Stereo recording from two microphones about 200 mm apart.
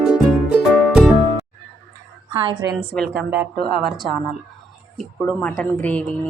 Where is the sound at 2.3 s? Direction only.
25° right (ahead or behind).